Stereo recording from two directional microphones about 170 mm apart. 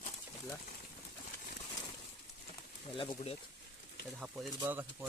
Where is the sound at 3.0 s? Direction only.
30° left (ahead or behind).